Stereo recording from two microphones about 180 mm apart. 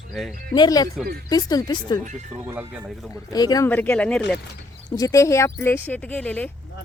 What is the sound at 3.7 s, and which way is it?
Speech, 10° left (ahead or behind).